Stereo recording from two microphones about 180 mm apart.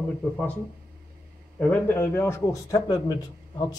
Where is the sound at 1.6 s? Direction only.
10° left (ahead or behind).